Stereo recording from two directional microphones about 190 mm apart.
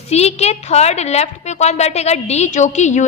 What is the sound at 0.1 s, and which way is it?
A woman's voice, 35° left (ahead or behind).